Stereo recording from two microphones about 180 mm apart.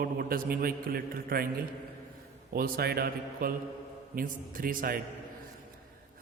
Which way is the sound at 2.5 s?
60° right (ahead or behind).